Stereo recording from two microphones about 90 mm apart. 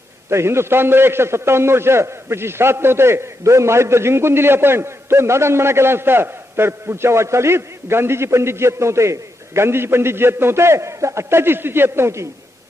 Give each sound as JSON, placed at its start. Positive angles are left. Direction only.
{"t": 0.3, "sound": "a man's voice", "side_deg": -30}